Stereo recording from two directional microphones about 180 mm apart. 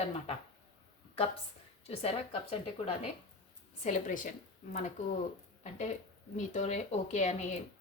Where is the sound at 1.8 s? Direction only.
35° left (ahead or behind).